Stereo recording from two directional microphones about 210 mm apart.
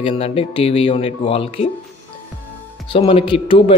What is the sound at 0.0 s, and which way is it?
A man's voice, 25° left (ahead or behind).